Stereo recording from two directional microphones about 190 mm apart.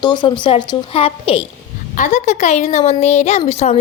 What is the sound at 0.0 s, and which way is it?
A woman's voice, 25° left (ahead or behind).